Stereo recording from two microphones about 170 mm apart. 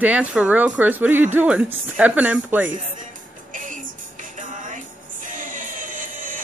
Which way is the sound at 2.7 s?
50° right (ahead or behind).